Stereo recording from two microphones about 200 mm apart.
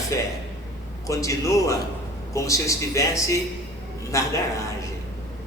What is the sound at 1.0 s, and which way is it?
A man's voice, 15° left (ahead or behind).